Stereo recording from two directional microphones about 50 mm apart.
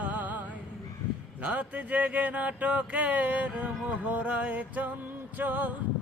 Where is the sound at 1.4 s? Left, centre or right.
Right.